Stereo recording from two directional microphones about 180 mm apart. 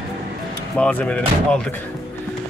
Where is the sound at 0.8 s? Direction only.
5° left (ahead or behind).